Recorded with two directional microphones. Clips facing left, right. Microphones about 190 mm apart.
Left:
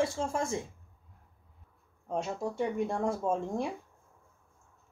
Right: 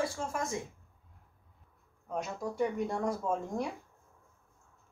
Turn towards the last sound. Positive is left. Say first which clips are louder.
# left 2 dB
turn(degrees=25)  # may be behind; listen again after turning